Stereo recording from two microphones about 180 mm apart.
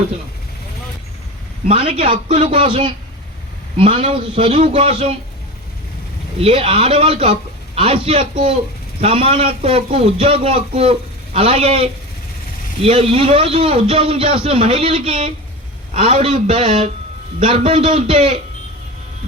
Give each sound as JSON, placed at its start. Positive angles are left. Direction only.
{"t": 1.6, "sound": "a man's voice", "side_deg": -30}
{"t": 6.4, "sound": "a man's voice", "side_deg": -35}